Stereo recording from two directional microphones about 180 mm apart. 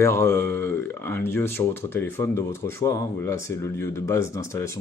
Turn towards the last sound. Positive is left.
turn(degrees=15)  # may be behind; listen again after turning